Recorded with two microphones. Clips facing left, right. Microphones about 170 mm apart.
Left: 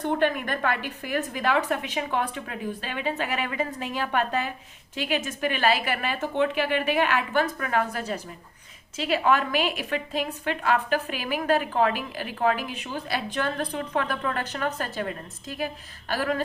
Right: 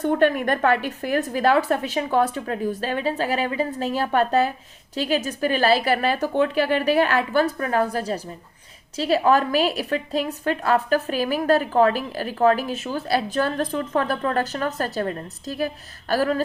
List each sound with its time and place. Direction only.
0.1 s a woman's voice: 50° right (ahead or behind)